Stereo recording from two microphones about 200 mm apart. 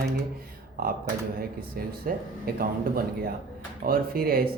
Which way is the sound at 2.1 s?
45° right (ahead or behind).